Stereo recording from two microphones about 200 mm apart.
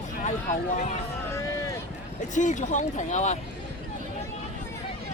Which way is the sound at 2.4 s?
40° left (ahead or behind).